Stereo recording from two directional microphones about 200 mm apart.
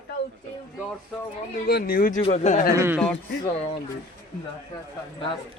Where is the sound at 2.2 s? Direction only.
35° left (ahead or behind).